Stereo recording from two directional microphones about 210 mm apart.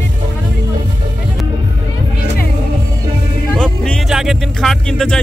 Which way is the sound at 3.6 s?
Centre (ahead or behind).